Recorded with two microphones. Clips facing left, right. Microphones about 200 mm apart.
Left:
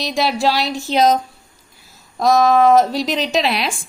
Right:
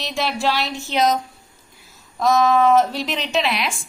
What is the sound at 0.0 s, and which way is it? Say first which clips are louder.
A woman's voice: left 4 dB; 35° left (ahead or behind).